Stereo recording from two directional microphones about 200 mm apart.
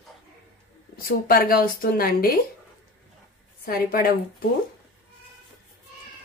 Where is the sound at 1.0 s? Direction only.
45° left (ahead or behind).